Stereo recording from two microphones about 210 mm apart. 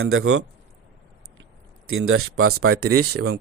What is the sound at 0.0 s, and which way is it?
Speech, 80° right.